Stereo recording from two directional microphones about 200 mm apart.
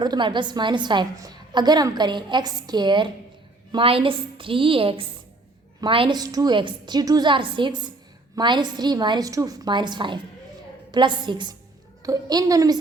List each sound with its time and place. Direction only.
0.0 s a woman's voice: 20° right (ahead or behind)